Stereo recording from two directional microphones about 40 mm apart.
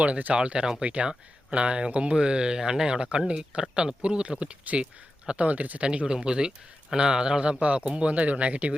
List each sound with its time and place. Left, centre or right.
0.0 s speech: right
0.3 s speech: right
5.8 s speech: right
7.9 s speech: right